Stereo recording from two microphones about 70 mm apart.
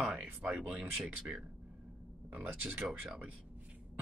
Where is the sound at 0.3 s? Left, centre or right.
Right.